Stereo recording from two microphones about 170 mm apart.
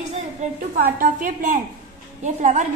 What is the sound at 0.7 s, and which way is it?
A woman's voice, 55° right (ahead or behind).